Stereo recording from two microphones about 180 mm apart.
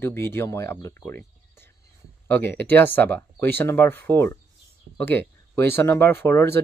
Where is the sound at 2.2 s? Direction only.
10° left (ahead or behind).